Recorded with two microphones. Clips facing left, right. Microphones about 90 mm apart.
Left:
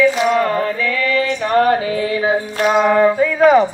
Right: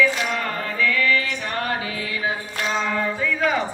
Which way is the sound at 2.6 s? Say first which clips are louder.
Left 11 dB; 60° left (ahead or behind).